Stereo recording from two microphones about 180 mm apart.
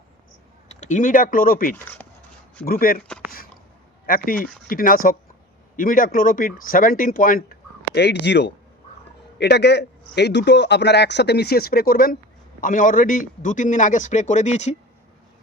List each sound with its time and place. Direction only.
0.7 s a man's voice: 40° left (ahead or behind)
4.0 s a man's voice: 50° left (ahead or behind)
7.9 s a man's voice: 70° left (ahead or behind); by 14.8 s 40° left (ahead or behind)